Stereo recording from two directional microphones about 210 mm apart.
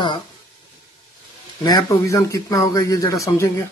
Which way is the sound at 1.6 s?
20° left (ahead or behind).